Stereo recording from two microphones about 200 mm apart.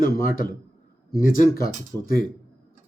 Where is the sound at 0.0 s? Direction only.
45° left (ahead or behind).